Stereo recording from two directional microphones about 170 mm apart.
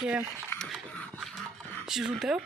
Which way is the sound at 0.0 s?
5° right (ahead or behind).